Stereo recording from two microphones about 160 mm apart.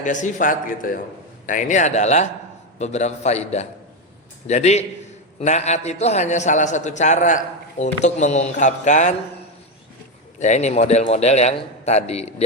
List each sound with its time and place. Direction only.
0.0 s a man's voice: 55° left (ahead or behind)
10.4 s a man's voice: 45° left (ahead or behind)